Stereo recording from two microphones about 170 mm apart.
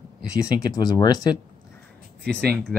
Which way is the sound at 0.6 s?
25° left (ahead or behind).